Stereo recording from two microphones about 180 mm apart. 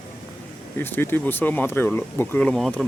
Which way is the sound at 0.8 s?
10° left (ahead or behind).